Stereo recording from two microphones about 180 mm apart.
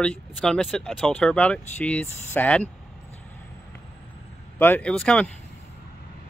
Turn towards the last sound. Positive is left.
turn(degrees=5)  # may be behind; listen again after turning